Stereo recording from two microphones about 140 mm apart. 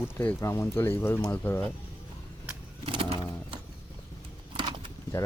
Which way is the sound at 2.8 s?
40° right (ahead or behind).